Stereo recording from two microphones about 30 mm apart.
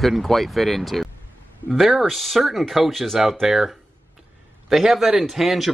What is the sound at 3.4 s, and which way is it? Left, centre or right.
Speech, centre.